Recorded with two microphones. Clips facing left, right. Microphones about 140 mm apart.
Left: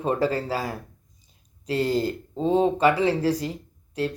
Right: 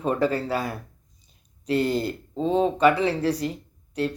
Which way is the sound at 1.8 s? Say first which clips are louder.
Left 1 dB; 90° left.